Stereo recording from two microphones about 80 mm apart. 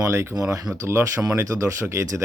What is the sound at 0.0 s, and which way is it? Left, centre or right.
Speech, right.